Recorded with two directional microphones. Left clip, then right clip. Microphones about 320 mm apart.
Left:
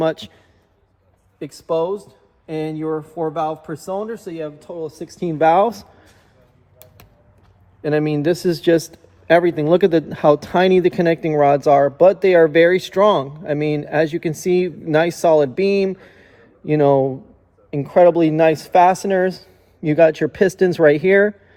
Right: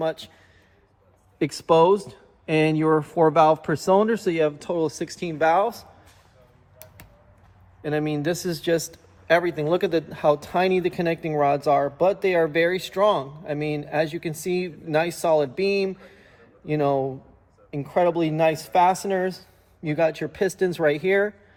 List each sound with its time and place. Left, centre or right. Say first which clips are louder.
0.0 s a man's voice: left 7 dB; left
1.4 s speech: right 3 dB; right
4.9 s speech: right 2 dB; centre
5.2 s speech: left 6 dB; centre
5.6 s speech: left 6 dB; left
7.8 s a man's voice: left 7 dB; left